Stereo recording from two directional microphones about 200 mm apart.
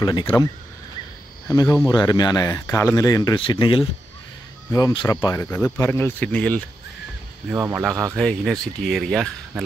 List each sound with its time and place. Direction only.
0.0 s speech: 20° left (ahead or behind)
1.5 s speech: 20° left (ahead or behind)
7.4 s speech: 10° right (ahead or behind)
8.2 s speech: centre (ahead or behind)